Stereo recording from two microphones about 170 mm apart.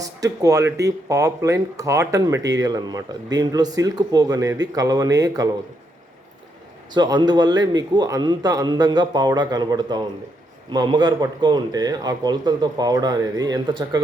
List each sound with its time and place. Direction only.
0.0 s speech: 20° right (ahead or behind)
6.9 s speech: 25° right (ahead or behind)